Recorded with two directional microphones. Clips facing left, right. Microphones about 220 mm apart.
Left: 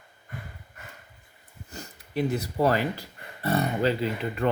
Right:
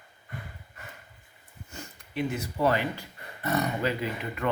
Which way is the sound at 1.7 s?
35° left (ahead or behind).